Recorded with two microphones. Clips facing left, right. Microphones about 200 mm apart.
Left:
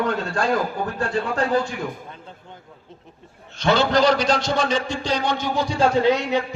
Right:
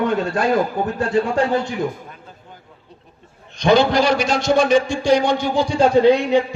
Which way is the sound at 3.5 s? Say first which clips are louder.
Right 4 dB; 15° right (ahead or behind).